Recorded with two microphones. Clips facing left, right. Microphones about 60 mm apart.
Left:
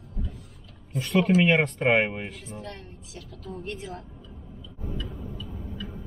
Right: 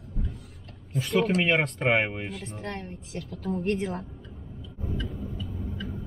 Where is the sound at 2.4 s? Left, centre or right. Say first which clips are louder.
Right 3 dB; right.